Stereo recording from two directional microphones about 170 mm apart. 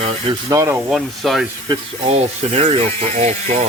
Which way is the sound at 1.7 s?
35° right (ahead or behind).